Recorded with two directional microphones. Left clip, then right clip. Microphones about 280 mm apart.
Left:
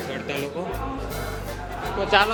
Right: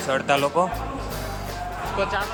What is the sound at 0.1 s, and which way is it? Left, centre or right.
Speech, centre.